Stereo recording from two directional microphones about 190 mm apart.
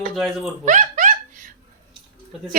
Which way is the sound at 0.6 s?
40° right (ahead or behind).